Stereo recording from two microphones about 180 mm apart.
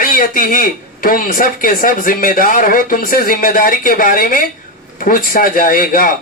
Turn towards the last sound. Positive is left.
turn(degrees=50)  # may be behind; listen again after turning